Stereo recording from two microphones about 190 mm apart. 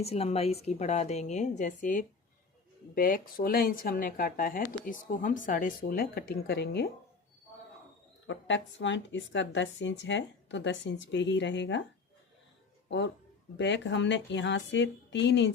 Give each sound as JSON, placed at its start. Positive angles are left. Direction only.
{"t": 0.0, "sound": "speech", "side_deg": 35}
{"t": 8.3, "sound": "speech", "side_deg": 75}
{"t": 13.6, "sound": "speech", "side_deg": 70}